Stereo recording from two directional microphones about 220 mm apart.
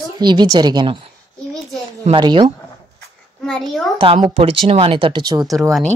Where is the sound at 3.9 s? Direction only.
25° right (ahead or behind).